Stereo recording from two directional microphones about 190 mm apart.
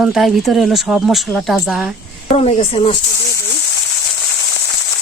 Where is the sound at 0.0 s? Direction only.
Centre (ahead or behind).